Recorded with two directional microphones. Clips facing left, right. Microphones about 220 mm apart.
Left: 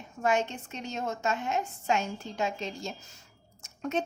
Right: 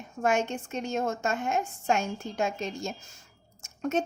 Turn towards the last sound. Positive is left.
turn(degrees=-45)  # may be behind; listen again after turning